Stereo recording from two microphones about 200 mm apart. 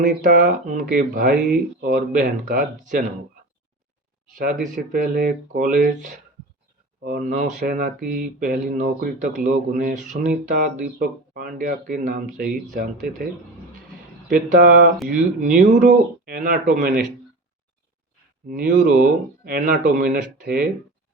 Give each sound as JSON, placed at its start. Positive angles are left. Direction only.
{"t": 0.0, "sound": "speech", "side_deg": -40}
{"t": 4.4, "sound": "speech", "side_deg": -40}
{"t": 14.3, "sound": "speech", "side_deg": -45}
{"t": 18.4, "sound": "speech", "side_deg": -45}